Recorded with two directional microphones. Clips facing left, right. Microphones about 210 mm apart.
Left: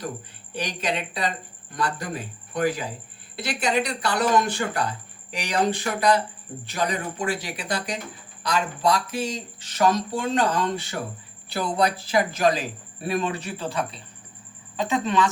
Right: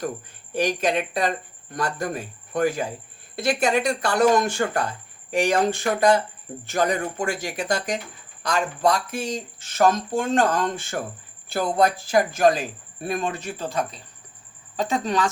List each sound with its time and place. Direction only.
0.5 s speech: 50° right (ahead or behind)